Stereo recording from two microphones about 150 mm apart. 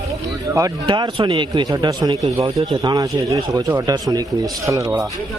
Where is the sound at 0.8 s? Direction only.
30° right (ahead or behind).